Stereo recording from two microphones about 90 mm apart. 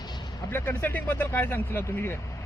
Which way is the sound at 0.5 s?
25° left (ahead or behind).